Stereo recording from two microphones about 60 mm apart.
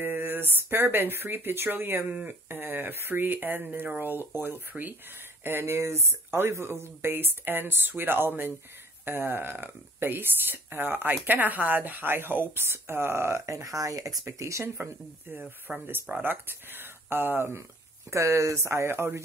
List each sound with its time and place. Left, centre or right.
0.0 s speech: right
15.9 s speech: right
18.1 s speech: right